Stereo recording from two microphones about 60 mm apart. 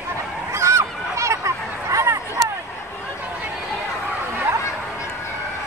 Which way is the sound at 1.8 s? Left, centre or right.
Right.